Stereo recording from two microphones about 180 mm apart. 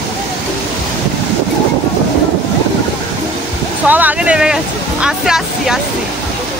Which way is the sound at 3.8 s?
10° right (ahead or behind).